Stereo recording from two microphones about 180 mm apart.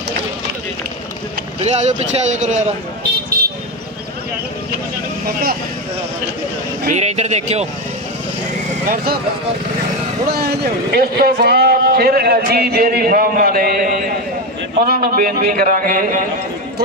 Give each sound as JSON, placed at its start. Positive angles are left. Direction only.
{"t": 1.6, "sound": "a man's voice", "side_deg": -40}
{"t": 6.9, "sound": "a man's voice", "side_deg": -40}
{"t": 8.9, "sound": "a man's voice", "side_deg": -60}
{"t": 10.3, "sound": "a man's voice", "side_deg": -60}